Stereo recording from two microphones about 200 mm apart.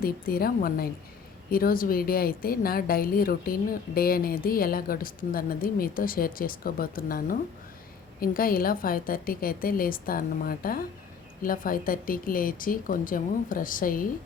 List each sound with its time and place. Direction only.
0.0 s speech: 50° left (ahead or behind)